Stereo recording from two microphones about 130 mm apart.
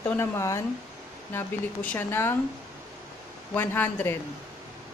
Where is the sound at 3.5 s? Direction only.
15° left (ahead or behind).